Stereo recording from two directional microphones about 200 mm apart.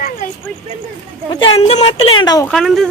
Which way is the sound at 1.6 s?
30° left (ahead or behind).